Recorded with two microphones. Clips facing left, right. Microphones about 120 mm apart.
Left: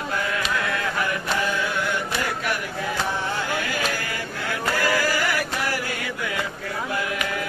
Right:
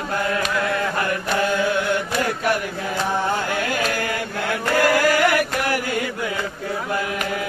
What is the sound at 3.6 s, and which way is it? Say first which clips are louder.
Chant: right 4 dB; 55° right (ahead or behind).